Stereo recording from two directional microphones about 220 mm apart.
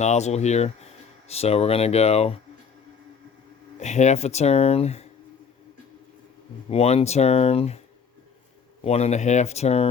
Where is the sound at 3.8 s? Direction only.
30° left (ahead or behind).